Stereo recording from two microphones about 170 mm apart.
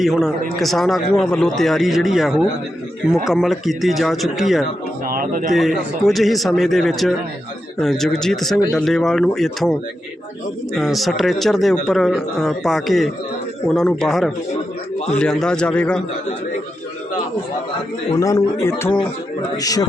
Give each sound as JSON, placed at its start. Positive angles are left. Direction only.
{"t": 0.0, "sound": "speech", "side_deg": 0}
{"t": 5.0, "sound": "a sound", "side_deg": -55}
{"t": 5.5, "sound": "speech", "side_deg": 0}
{"t": 10.8, "sound": "speech", "side_deg": 0}
{"t": 18.1, "sound": "a man's voice", "side_deg": 20}